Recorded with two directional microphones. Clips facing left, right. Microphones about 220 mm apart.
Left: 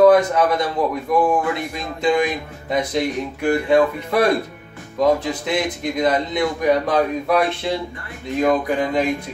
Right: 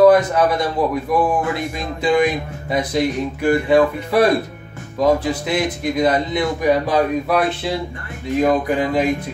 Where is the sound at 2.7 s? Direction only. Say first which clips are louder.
Right 1 dB; 5° right (ahead or behind).